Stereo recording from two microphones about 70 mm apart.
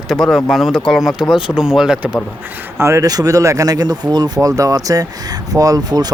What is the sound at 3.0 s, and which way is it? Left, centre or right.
Speech, right.